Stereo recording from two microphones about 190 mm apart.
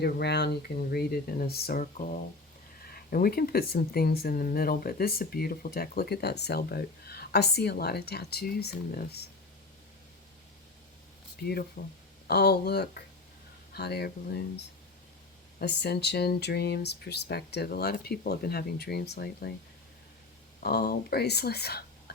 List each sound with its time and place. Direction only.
0.0 s speech: 60° left (ahead or behind)
2.9 s speech: 50° left (ahead or behind)
11.8 s speech: 50° left (ahead or behind)
20.6 s speech: 55° left (ahead or behind)